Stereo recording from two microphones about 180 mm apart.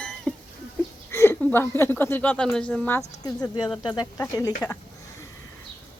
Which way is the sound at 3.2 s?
20° left (ahead or behind).